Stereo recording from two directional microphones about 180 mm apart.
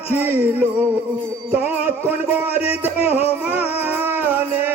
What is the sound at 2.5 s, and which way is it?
Music, 35° left (ahead or behind).